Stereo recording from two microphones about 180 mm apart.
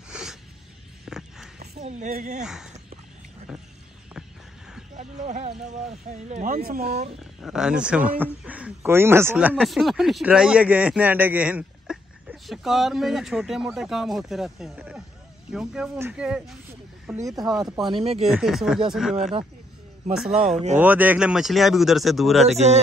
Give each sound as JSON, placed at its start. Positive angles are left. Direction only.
{"t": 0.1, "sound": "a sound", "side_deg": -5}
{"t": 1.8, "sound": "speech", "side_deg": -40}
{"t": 2.4, "sound": "speech", "side_deg": -5}
{"t": 4.9, "sound": "speech", "side_deg": -40}
{"t": 7.2, "sound": "speech", "side_deg": 0}
{"t": 9.6, "sound": "speech", "side_deg": 0}
{"t": 17.9, "sound": "speech", "side_deg": -35}
{"t": 18.2, "sound": "speech", "side_deg": 0}